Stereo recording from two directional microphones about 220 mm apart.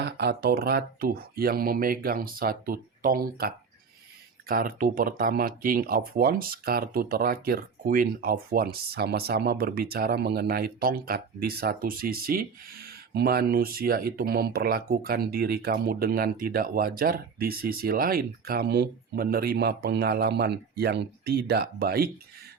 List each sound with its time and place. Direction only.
0.0 s speech: 45° right (ahead or behind)